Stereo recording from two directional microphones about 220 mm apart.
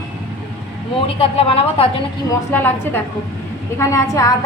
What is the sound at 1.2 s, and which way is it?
Speech, 25° left (ahead or behind).